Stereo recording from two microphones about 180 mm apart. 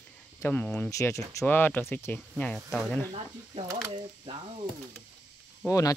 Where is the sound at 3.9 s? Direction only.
30° right (ahead or behind).